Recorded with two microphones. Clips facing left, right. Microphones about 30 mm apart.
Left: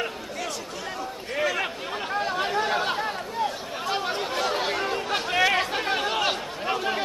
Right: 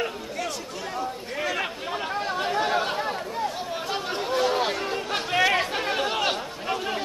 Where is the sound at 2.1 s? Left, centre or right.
Centre.